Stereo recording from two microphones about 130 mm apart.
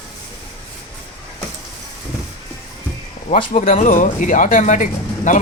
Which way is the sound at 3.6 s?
75° left (ahead or behind).